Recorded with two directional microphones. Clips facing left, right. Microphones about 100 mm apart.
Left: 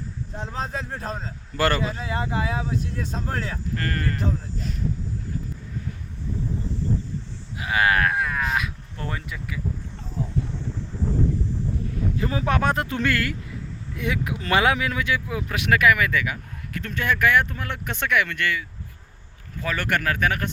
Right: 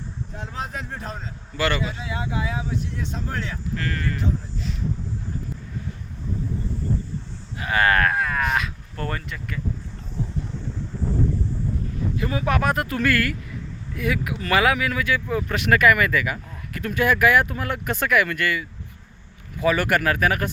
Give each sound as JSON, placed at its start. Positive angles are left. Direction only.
{"t": 0.3, "sound": "a man's voice", "side_deg": 30}
{"t": 7.6, "sound": "speech", "side_deg": 5}
{"t": 12.1, "sound": "speech", "side_deg": 30}
{"t": 15.3, "sound": "speech", "side_deg": 5}